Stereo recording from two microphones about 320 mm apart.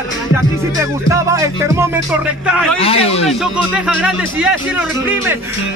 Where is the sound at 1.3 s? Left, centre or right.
Centre.